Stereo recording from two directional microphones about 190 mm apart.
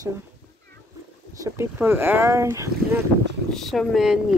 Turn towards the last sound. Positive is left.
turn(degrees=0)  # may be behind; listen again after turning